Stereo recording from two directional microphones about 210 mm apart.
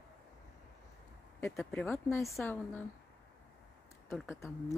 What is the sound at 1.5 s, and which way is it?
Speech, centre (ahead or behind).